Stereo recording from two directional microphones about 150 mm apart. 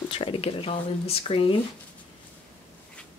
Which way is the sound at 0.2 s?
40° left (ahead or behind).